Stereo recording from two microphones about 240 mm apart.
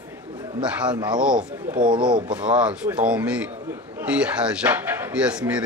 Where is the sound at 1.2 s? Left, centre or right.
Centre.